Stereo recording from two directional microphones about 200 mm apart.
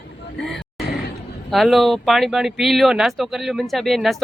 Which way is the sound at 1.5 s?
Centre (ahead or behind).